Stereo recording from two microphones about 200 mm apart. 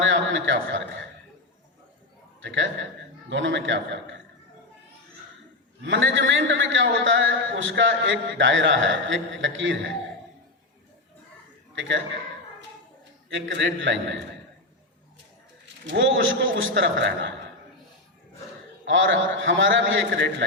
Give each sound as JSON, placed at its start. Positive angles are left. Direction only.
{"t": 0.0, "sound": "a man's voice", "side_deg": -70}
{"t": 2.4, "sound": "a man's voice", "side_deg": -70}
{"t": 5.8, "sound": "a man's voice", "side_deg": -70}
{"t": 11.7, "sound": "a man's voice", "side_deg": -70}
{"t": 13.3, "sound": "a man's voice", "side_deg": -65}
{"t": 15.9, "sound": "a man's voice", "side_deg": -70}
{"t": 18.9, "sound": "a man's voice", "side_deg": -70}